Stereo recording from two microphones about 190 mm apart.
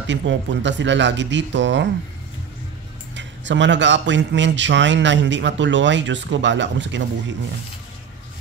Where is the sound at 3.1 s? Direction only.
70° right (ahead or behind).